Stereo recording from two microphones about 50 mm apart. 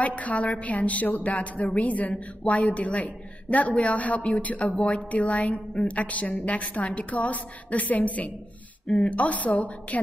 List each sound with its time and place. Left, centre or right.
0.0 s a woman's voice: left